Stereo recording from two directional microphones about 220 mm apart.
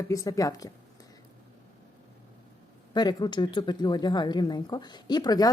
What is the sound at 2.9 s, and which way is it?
Speech, 20° left (ahead or behind).